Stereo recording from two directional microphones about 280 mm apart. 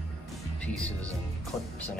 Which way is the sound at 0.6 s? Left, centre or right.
Centre.